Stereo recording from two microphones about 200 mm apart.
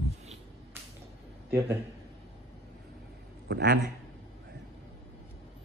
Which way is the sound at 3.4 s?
55° right (ahead or behind).